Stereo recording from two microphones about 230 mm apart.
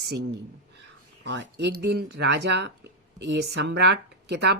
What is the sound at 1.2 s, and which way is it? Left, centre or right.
Speech, right.